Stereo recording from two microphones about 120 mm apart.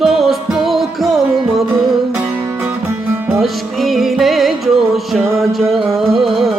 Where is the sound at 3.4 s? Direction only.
Centre (ahead or behind).